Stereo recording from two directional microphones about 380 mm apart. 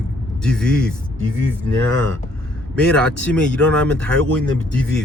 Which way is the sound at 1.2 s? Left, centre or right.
Right.